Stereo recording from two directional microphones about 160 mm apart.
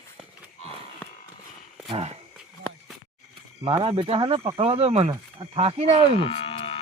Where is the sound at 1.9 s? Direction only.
40° right (ahead or behind).